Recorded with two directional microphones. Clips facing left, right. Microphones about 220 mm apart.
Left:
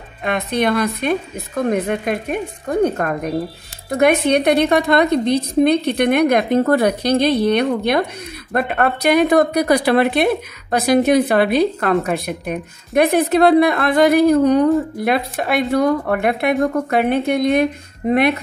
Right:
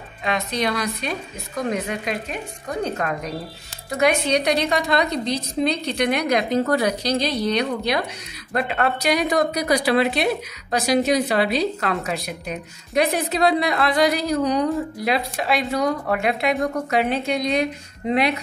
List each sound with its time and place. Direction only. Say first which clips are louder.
0.2 s a woman's voice: left 5 dB; 55° left (ahead or behind)